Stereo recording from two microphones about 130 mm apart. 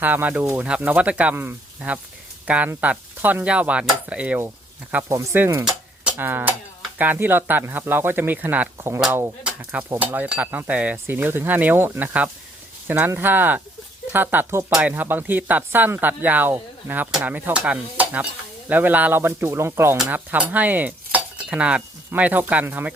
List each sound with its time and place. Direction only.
0.0 s speech: 15° right (ahead or behind)
6.1 s a sound: 15° right (ahead or behind)
7.0 s speech: 15° right (ahead or behind)
20.0 s cutlery: 15° right (ahead or behind)